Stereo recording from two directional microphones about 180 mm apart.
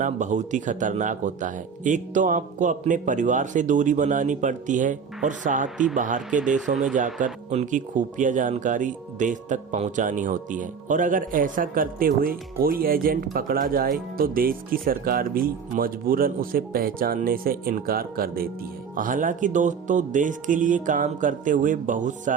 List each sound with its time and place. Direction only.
0.0 s speech: 45° right (ahead or behind)
5.6 s speech: 5° right (ahead or behind)
6.0 s speech: 45° right (ahead or behind)